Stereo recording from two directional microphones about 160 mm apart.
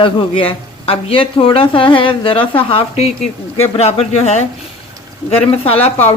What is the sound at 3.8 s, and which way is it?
Speech, 40° left (ahead or behind).